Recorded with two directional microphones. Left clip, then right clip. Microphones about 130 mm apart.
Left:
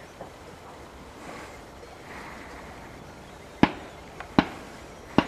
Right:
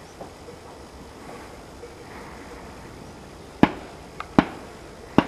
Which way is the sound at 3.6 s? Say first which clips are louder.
Right 3 dB; centre (ahead or behind).